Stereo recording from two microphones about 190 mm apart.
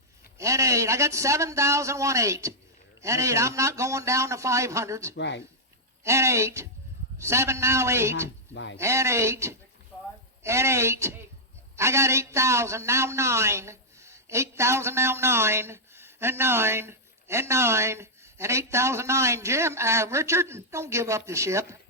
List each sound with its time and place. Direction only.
0.3 s a man's voice: 15° right (ahead or behind)
5.1 s speech: 65° left (ahead or behind)
6.1 s a man's voice: 15° right (ahead or behind)
8.5 s speech: 70° left (ahead or behind)
8.8 s a man's voice: 15° right (ahead or behind)
9.9 s a sound: 10° left (ahead or behind)
10.4 s a man's voice: 15° right (ahead or behind)